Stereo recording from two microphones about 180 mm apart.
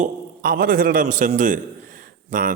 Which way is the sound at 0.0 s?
55° right (ahead or behind).